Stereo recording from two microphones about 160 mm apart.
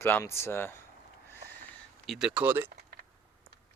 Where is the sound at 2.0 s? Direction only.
Centre (ahead or behind).